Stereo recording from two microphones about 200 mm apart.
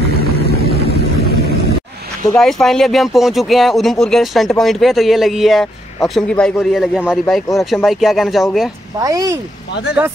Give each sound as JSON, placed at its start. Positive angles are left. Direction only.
{"t": 0.2, "sound": "vehicle", "side_deg": -50}
{"t": 2.3, "sound": "speech", "side_deg": 0}
{"t": 9.0, "sound": "speech", "side_deg": -15}